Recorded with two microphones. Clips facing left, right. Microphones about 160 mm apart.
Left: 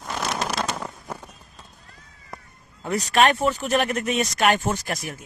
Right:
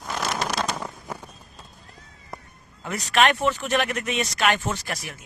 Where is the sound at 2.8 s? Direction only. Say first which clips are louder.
Left 2 dB; 35° left (ahead or behind).